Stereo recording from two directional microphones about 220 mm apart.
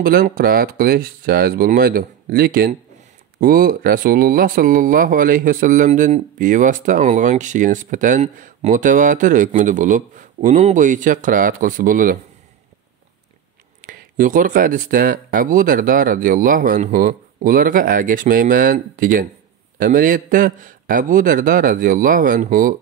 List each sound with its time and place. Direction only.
0.0 s speech: 40° right (ahead or behind)
13.7 s speech: 40° right (ahead or behind)